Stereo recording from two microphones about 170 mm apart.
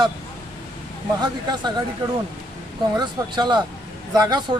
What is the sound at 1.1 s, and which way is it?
Speech, 25° right (ahead or behind).